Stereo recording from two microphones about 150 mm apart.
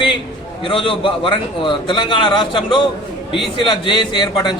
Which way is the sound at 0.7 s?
35° left (ahead or behind).